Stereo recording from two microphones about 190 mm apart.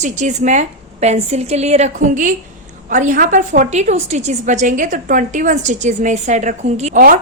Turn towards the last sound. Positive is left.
turn(degrees=-35)  # may be behind; listen again after turning